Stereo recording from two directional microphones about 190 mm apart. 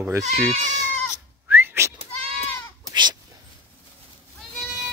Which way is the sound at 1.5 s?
10° right (ahead or behind).